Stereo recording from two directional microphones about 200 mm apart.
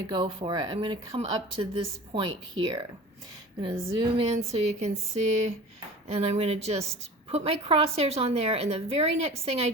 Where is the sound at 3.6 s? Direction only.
30° right (ahead or behind).